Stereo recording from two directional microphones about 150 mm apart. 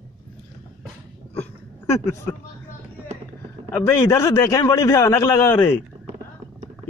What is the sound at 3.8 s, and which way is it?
A man's voice, 20° left (ahead or behind).